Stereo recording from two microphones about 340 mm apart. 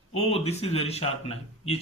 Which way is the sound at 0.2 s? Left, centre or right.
Centre.